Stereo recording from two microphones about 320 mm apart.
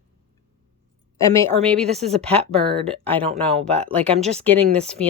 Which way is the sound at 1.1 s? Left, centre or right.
Centre.